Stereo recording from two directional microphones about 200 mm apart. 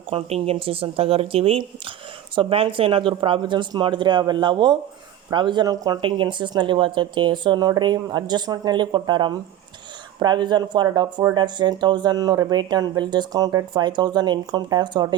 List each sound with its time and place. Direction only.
0.1 s speech: 30° right (ahead or behind)